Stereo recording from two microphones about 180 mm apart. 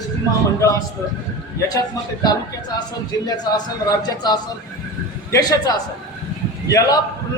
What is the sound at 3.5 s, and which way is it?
A man's voice, 20° left (ahead or behind).